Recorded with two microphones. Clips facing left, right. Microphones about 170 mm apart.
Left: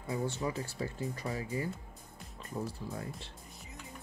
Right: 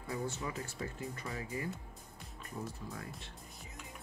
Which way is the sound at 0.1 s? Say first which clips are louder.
Left 4 dB; 30° left (ahead or behind).